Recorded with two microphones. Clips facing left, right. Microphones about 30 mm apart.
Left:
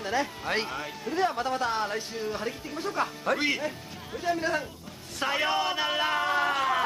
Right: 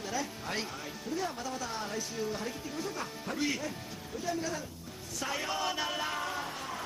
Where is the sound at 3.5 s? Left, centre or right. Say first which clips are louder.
Left 6 dB; left.